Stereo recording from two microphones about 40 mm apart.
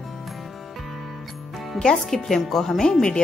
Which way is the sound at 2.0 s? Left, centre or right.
Centre.